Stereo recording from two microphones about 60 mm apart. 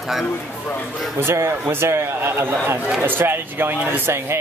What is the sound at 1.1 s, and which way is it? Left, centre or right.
A man's voice, right.